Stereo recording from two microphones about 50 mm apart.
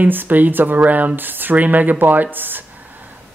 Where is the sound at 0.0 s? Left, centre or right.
Right.